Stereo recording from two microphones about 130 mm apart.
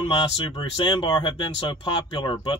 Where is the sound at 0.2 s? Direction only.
45° left (ahead or behind).